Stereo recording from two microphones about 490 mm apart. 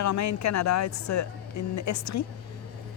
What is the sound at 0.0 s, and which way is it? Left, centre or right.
A woman's voice, left.